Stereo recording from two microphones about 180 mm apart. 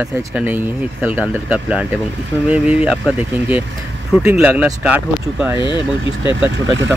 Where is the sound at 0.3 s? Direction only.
5° right (ahead or behind).